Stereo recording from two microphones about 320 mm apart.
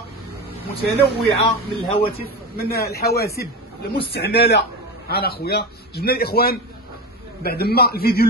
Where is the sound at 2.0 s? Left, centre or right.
Centre.